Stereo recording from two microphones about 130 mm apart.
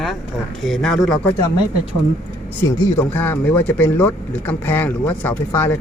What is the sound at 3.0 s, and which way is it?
Speech, 15° left (ahead or behind).